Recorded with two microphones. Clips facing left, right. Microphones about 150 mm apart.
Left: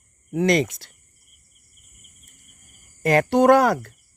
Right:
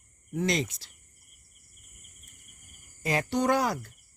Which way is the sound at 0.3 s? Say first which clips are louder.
Left 9 dB; 70° left (ahead or behind).